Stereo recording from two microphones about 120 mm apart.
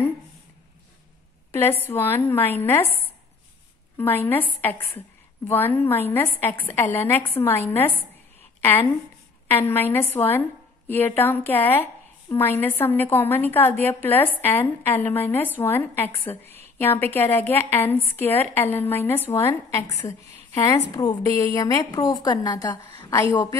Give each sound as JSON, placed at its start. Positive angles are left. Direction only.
{"t": 1.5, "sound": "a woman's voice", "side_deg": 20}
{"t": 4.0, "sound": "a woman's voice", "side_deg": 15}
{"t": 9.5, "sound": "a woman's voice", "side_deg": 20}
{"t": 16.4, "sound": "a sound", "side_deg": -60}
{"t": 16.7, "sound": "a woman's voice", "side_deg": 15}
{"t": 22.9, "sound": "a woman's voice", "side_deg": 20}